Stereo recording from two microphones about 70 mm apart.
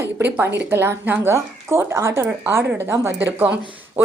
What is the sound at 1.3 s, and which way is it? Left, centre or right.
Speech, right.